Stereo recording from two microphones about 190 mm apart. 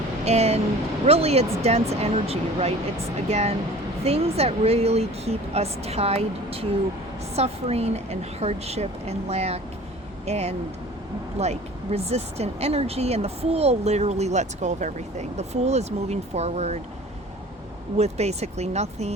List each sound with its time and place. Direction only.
0.3 s speech: 35° right (ahead or behind)
17.9 s speech: 35° right (ahead or behind)